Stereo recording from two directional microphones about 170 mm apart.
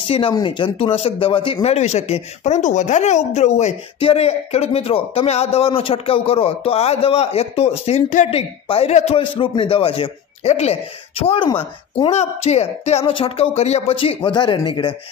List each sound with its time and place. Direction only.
0.0 s speech: 30° left (ahead or behind)